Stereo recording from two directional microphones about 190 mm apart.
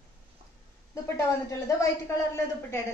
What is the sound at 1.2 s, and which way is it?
A woman's voice, 15° left (ahead or behind).